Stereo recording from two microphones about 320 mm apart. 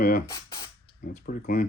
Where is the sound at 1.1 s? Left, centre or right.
Left.